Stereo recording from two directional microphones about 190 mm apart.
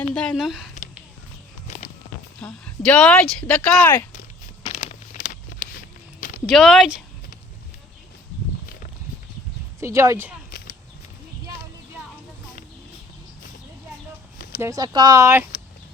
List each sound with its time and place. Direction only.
0.1 s speech: 5° left (ahead or behind)
2.4 s speech: 5° left (ahead or behind)
4.7 s a sound: 40° left (ahead or behind)
6.5 s speech: centre (ahead or behind)
9.8 s speech: 15° right (ahead or behind)
10.5 s a sound: 50° left (ahead or behind)
14.6 s speech: 20° right (ahead or behind)